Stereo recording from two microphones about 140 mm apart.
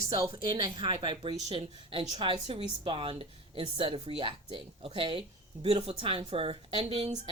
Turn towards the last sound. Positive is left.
turn(degrees=-40)  # may be behind; listen again after turning